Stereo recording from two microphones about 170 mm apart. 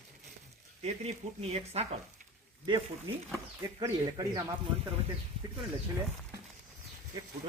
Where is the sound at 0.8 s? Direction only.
40° right (ahead or behind).